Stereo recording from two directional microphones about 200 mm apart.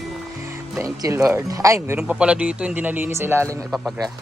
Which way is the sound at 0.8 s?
15° right (ahead or behind).